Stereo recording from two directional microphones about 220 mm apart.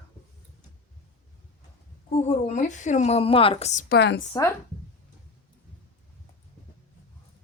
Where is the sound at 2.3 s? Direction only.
35° left (ahead or behind).